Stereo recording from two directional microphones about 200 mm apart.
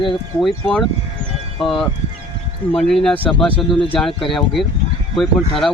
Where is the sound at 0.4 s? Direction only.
Centre (ahead or behind).